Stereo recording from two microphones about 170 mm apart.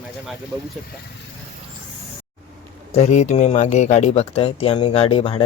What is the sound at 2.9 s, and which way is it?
Speech, 40° left (ahead or behind).